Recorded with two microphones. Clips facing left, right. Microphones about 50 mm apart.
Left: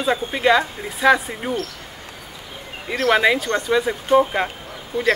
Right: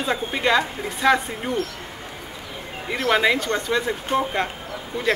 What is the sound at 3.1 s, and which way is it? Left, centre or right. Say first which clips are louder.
Speech: left 2 dB; centre.